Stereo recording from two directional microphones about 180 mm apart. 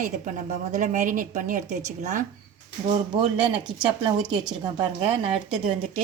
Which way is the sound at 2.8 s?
35° right (ahead or behind).